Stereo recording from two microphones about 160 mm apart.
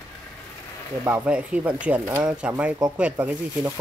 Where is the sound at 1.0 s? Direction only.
10° right (ahead or behind).